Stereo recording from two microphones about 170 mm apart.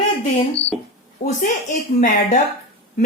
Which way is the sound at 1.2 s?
45° left (ahead or behind).